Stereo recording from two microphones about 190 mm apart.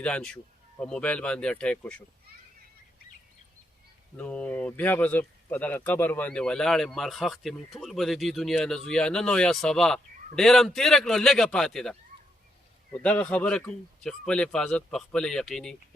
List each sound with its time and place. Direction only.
0.0 s speech: 5° left (ahead or behind)
4.2 s speech: 5° left (ahead or behind)